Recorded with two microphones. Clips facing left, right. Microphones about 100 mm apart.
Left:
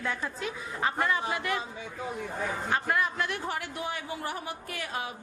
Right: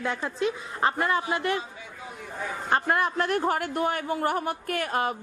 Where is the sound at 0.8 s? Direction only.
40° right (ahead or behind).